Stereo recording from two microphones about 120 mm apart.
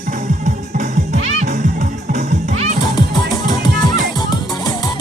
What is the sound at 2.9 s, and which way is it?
Music, 35° left (ahead or behind).